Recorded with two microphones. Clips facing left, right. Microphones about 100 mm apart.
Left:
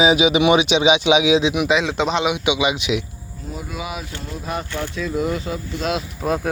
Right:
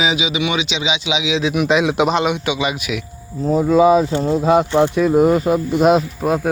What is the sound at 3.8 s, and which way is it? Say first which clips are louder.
Speech: right 19 dB; 35° right (ahead or behind).